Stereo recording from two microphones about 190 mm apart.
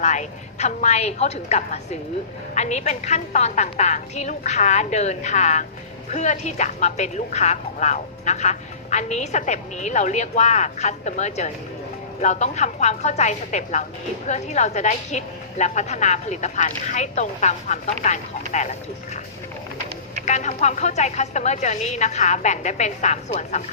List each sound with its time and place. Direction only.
0.0 s speech: 40° left (ahead or behind)
20.2 s speech: 35° left (ahead or behind)